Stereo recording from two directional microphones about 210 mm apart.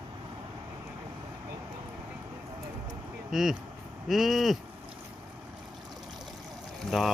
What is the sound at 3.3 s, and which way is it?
Livestock, centre (ahead or behind).